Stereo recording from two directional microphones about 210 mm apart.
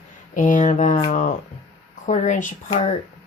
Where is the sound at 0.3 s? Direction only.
40° left (ahead or behind).